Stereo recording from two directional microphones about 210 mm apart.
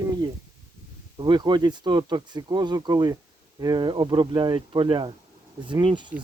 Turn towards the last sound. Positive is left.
turn(degrees=-20)  # may be behind; listen again after turning